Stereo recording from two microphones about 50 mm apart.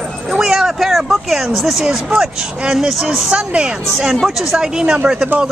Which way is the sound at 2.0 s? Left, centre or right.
Centre.